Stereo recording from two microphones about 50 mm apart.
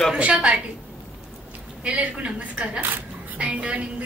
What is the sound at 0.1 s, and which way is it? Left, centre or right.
Speech, right.